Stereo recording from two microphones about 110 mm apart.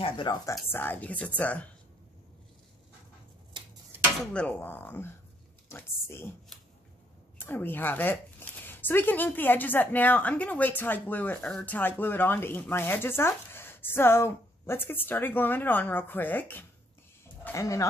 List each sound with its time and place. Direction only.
0.0 s speech: 50° left (ahead or behind)
0.7 s speech: 20° left (ahead or behind)
3.9 s dishes: 15° right (ahead or behind)
4.3 s speech: 10° left (ahead or behind)
7.3 s speech: 20° left (ahead or behind)
17.6 s speech: 30° left (ahead or behind)